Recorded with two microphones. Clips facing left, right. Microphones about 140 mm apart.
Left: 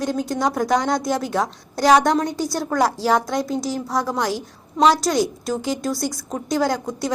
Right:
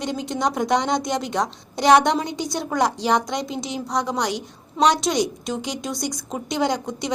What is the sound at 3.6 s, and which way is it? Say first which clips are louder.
Speech: left 4 dB; 20° right (ahead or behind).